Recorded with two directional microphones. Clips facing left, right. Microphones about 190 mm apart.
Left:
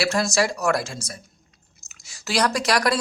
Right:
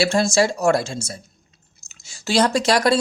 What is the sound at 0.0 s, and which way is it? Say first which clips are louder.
Speech: right 4 dB; 25° right (ahead or behind).